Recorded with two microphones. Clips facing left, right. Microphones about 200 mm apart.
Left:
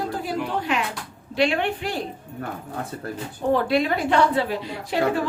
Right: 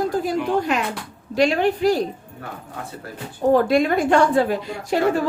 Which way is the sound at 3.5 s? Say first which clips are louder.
Right 4 dB; 45° right (ahead or behind).